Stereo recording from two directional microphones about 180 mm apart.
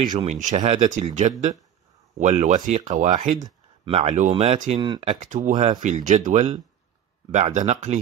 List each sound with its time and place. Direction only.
0.0 s speech: 25° right (ahead or behind)
0.3 s speech: 40° right (ahead or behind)
2.1 s speech: 40° right (ahead or behind)
3.4 s speech: 30° right (ahead or behind)
4.7 s speech: 25° right (ahead or behind)
5.2 s speech: 45° right (ahead or behind)
7.5 s speech: 40° right (ahead or behind)